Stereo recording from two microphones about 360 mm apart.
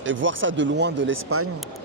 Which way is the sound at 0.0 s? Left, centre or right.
Right.